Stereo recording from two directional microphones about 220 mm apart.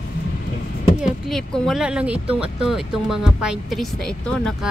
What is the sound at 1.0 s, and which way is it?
Speech, centre (ahead or behind).